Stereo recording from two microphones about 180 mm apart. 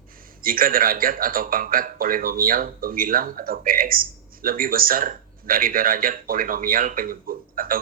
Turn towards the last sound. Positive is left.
turn(degrees=-50)  # may be behind; listen again after turning